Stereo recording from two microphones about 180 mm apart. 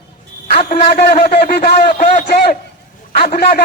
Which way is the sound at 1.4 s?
60° left (ahead or behind).